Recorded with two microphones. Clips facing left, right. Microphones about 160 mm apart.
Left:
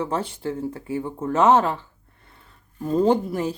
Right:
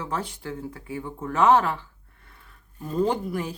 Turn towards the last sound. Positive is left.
turn(degrees=25)  # may be behind; listen again after turning